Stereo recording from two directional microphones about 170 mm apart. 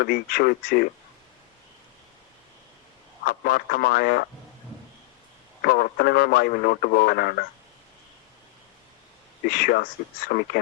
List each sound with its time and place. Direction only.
0.0 s speech: 65° left (ahead or behind)
3.2 s speech: 65° left (ahead or behind)
5.6 s speech: 65° left (ahead or behind)
9.5 s speech: 65° left (ahead or behind)